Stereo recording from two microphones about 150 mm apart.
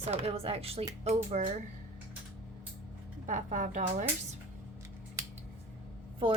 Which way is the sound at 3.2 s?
60° right (ahead or behind).